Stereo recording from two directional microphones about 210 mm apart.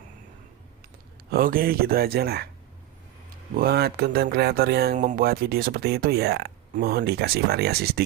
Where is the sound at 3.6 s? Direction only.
50° right (ahead or behind).